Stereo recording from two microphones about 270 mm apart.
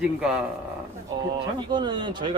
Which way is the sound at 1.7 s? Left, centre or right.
Centre.